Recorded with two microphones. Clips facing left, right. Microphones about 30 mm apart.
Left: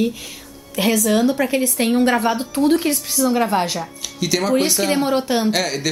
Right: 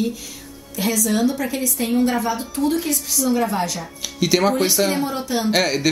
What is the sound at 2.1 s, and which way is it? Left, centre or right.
A woman's voice, left.